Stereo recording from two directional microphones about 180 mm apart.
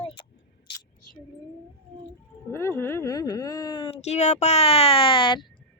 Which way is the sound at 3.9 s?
40° left (ahead or behind).